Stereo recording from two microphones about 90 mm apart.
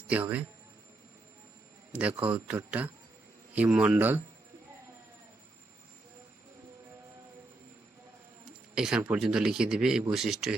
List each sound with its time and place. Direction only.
0.1 s a man's voice: 15° right (ahead or behind)
1.9 s a man's voice: 15° right (ahead or behind)
3.8 s speech: 25° right (ahead or behind)
8.7 s a man's voice: 5° right (ahead or behind)